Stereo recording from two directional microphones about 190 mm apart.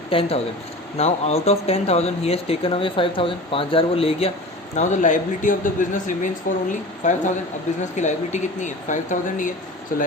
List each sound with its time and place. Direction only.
0.1 s speech: 30° left (ahead or behind); by 10.1 s 45° left (ahead or behind)